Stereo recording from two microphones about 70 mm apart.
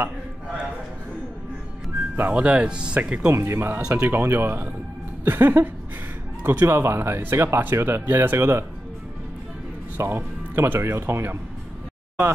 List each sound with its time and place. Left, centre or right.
2.1 s speech: right
3.3 s speech: right
9.9 s speech: right